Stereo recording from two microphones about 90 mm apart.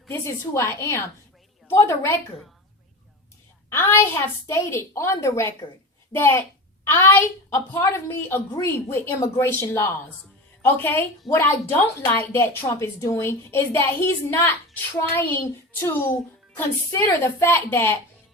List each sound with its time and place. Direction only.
0.1 s a woman's voice: 30° left (ahead or behind)
3.7 s a woman's voice: 25° left (ahead or behind)
15.8 s a woman's voice: 20° left (ahead or behind)